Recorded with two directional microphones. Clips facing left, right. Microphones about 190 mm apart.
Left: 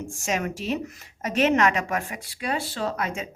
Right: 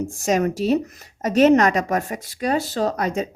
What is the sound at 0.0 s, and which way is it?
Speech, 35° right (ahead or behind).